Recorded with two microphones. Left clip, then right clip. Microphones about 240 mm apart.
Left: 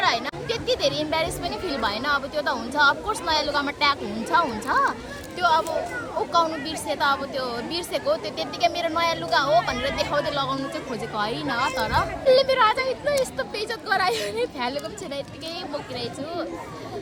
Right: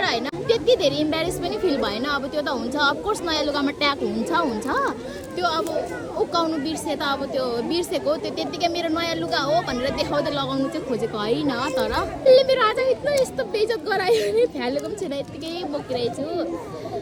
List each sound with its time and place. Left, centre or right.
0.0 s a child's voice: centre
6.7 s a child's voice: centre